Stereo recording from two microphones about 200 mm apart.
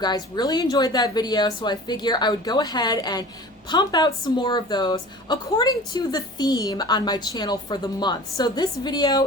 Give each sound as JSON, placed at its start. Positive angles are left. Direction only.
{"t": 0.0, "sound": "a woman's voice", "side_deg": 20}